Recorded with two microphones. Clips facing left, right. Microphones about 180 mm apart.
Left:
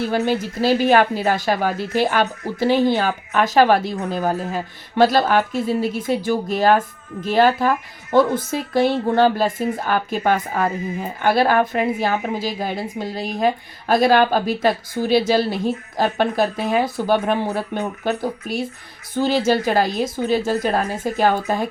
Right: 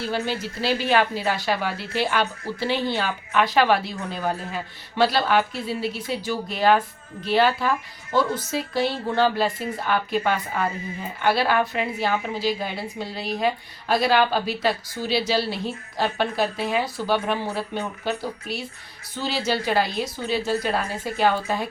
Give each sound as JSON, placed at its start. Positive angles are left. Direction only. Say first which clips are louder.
{"t": 0.3, "sound": "a woman's voice", "louder": "left 7 dB", "side_deg": 50}